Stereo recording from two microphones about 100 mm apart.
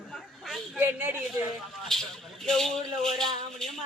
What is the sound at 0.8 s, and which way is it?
Speech, 20° right (ahead or behind).